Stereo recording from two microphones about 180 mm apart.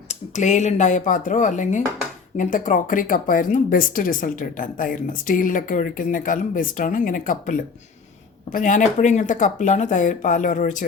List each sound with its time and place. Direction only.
0.1 s speech: 40° left (ahead or behind)